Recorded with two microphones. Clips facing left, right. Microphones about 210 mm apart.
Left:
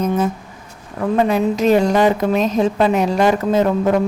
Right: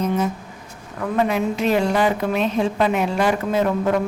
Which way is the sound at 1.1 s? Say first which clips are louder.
Left 4 dB; 35° left (ahead or behind).